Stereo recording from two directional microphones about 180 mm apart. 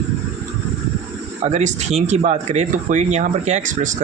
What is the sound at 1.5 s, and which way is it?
Speech, 40° right (ahead or behind).